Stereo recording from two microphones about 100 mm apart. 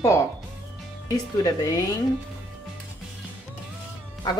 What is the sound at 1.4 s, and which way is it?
Speech, 35° left (ahead or behind).